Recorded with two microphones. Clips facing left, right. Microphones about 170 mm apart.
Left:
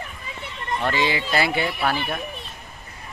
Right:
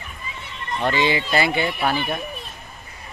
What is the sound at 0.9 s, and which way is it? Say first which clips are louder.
Speech: right 3 dB; centre (ahead or behind).